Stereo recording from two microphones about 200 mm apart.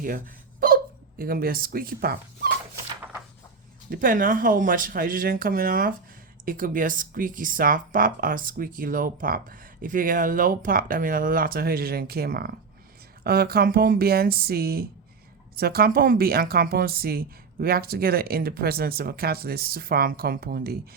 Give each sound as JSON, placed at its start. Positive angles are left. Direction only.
{"t": 1.2, "sound": "speech", "side_deg": -45}
{"t": 3.0, "sound": "a sound", "side_deg": -5}
{"t": 3.8, "sound": "speech", "side_deg": -45}